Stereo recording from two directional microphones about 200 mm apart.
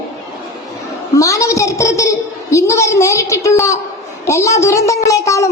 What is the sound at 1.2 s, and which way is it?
A woman's voice, 15° left (ahead or behind).